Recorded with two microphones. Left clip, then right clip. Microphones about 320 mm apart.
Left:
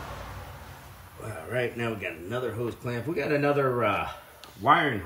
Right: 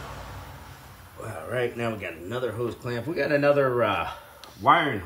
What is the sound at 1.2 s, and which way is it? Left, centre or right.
Speech, centre.